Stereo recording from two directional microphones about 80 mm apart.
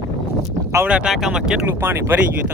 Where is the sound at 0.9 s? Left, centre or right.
Centre.